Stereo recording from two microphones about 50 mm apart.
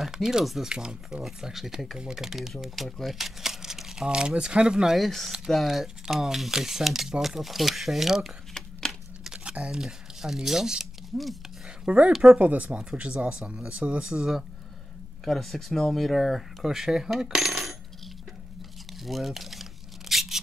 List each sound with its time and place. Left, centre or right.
0.0 s speech: centre
1.2 s speech: centre
4.9 s speech: centre
8.6 s a sound: centre
9.4 s speech: right; by 11.3 s centre
11.8 s speech: right
15.2 s speech: centre
18.9 s a sound: centre